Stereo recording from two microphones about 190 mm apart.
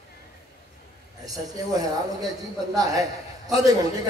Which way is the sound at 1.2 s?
20° right (ahead or behind).